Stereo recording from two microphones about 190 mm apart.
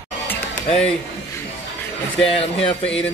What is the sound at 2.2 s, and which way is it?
Speech, 30° left (ahead or behind).